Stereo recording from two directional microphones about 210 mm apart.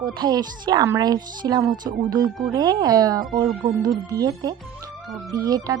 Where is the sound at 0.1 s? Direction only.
20° right (ahead or behind).